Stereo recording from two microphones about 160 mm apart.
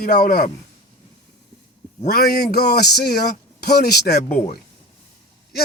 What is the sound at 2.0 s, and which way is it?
Speech, 75° left (ahead or behind).